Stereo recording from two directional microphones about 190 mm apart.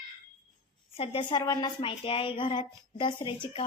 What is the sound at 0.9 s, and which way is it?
Speech, 30° left (ahead or behind).